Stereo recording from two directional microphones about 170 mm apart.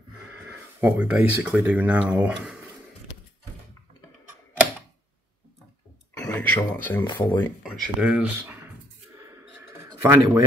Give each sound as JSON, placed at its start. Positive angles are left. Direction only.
{"t": 0.5, "sound": "speech", "side_deg": -10}
{"t": 6.3, "sound": "speech", "side_deg": 10}
{"t": 7.1, "sound": "speech", "side_deg": 25}
{"t": 7.6, "sound": "speech", "side_deg": -5}
{"t": 9.1, "sound": "a sound", "side_deg": -15}